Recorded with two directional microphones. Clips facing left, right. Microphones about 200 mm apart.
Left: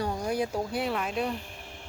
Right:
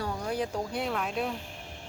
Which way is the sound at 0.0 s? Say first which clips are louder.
Left 2 dB; 15° left (ahead or behind).